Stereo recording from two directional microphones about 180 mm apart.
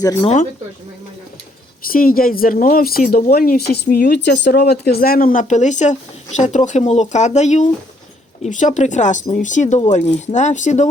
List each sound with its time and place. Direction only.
0.0 s speech: 20° left (ahead or behind)
1.9 s speech: 50° left (ahead or behind)